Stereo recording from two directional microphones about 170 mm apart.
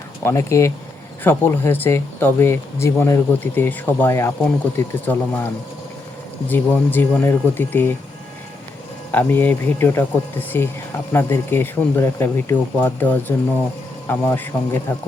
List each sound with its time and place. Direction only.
0.3 s speech: 15° left (ahead or behind)
6.5 s speech: 10° left (ahead or behind)
9.1 s speech: 10° left (ahead or behind)